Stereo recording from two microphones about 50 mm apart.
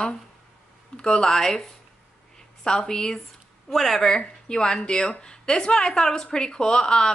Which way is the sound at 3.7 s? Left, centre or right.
Centre.